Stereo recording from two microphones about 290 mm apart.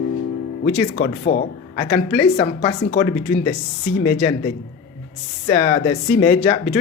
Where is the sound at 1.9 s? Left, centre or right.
Centre.